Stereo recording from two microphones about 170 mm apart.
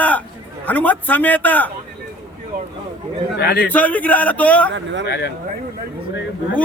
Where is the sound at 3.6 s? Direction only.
10° left (ahead or behind).